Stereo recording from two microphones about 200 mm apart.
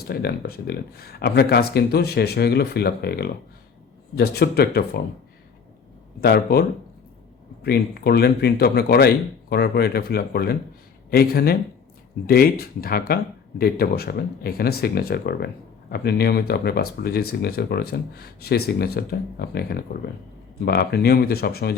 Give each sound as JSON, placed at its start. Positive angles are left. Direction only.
{"t": 0.1, "sound": "speech", "side_deg": 50}
{"t": 6.1, "sound": "speech", "side_deg": 50}